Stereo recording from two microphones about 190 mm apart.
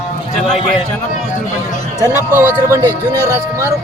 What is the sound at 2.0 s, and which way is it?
Speech, 10° right (ahead or behind).